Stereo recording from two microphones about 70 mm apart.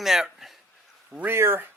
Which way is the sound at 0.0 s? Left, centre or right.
Centre.